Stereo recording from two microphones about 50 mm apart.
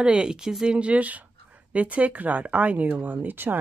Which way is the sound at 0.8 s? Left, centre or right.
Right.